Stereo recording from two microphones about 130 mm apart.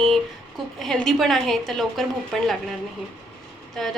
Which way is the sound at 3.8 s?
5° left (ahead or behind).